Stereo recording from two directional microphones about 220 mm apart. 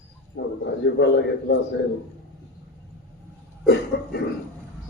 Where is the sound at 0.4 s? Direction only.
55° left (ahead or behind).